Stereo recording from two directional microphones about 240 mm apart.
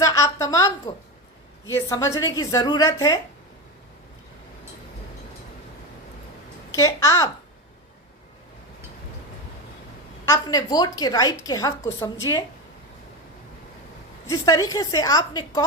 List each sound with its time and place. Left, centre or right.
0.0 s a woman's voice: centre
6.7 s a woman's voice: centre
10.2 s a woman's voice: centre
14.3 s a woman's voice: centre